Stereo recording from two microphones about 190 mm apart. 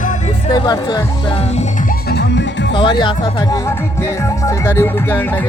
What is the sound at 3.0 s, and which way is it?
Speech, 25° left (ahead or behind).